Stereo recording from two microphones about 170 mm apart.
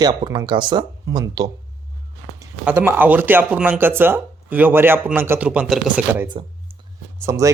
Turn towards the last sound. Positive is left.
turn(degrees=-20)  # may be behind; listen again after turning